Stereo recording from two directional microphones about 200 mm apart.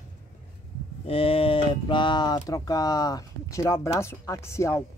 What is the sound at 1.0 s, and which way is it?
Speech, 30° left (ahead or behind).